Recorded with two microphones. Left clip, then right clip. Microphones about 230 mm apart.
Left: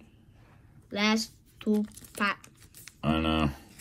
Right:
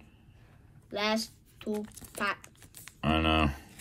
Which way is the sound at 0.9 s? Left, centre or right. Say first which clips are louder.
Left 2 dB; left.